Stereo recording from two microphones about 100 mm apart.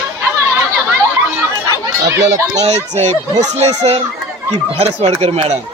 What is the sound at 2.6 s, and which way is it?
Speech, 90° right.